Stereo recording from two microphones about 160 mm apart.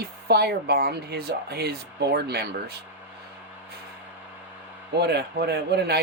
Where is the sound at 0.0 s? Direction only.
80° right.